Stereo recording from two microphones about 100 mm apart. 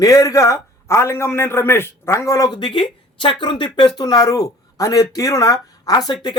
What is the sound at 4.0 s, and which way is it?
Speech, 40° left (ahead or behind).